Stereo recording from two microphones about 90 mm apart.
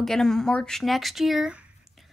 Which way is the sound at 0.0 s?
5° left (ahead or behind).